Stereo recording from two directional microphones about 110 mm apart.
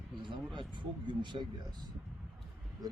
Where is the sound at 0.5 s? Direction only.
45° right (ahead or behind).